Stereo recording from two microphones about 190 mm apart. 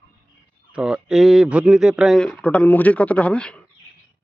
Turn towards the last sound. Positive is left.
turn(degrees=5)  # may be behind; listen again after turning